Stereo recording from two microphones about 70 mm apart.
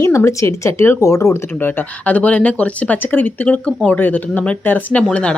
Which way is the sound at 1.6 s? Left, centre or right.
Left.